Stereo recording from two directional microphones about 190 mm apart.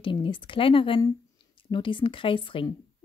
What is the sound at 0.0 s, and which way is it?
Speech, 25° left (ahead or behind).